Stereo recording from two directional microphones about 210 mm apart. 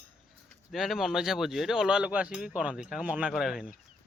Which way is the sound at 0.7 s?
Centre (ahead or behind).